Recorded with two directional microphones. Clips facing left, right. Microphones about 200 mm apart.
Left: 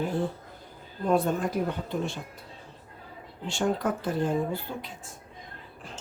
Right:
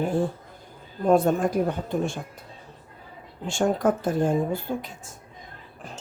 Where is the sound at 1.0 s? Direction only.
45° right (ahead or behind).